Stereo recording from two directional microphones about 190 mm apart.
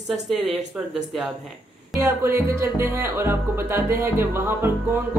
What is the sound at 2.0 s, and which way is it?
Music, 15° right (ahead or behind).